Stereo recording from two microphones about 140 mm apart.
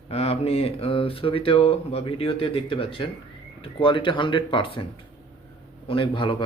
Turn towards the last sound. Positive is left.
turn(degrees=40)  # may be behind; listen again after turning